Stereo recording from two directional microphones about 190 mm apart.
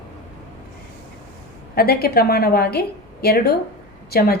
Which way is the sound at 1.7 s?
55° left (ahead or behind).